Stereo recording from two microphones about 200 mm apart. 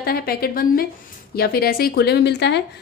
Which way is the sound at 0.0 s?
50° left (ahead or behind).